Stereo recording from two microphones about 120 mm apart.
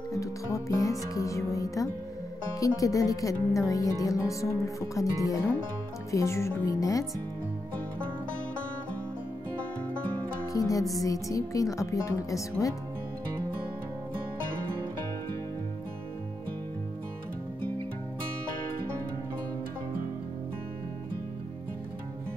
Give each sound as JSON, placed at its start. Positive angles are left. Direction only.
{"t": 0.1, "sound": "speech", "side_deg": 25}
{"t": 10.4, "sound": "music", "side_deg": 30}
{"t": 11.1, "sound": "speech", "side_deg": 30}